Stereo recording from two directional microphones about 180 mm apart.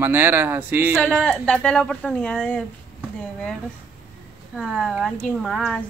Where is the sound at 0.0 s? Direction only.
10° right (ahead or behind).